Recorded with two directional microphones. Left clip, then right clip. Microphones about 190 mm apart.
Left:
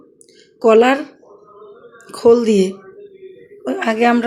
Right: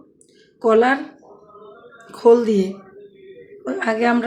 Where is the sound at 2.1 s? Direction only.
15° left (ahead or behind).